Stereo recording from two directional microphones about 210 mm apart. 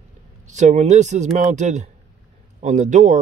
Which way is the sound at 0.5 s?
35° right (ahead or behind).